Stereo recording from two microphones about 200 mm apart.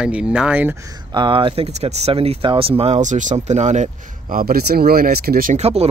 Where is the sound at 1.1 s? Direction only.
25° right (ahead or behind).